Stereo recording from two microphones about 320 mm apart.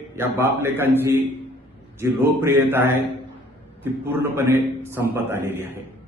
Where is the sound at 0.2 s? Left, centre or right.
Centre.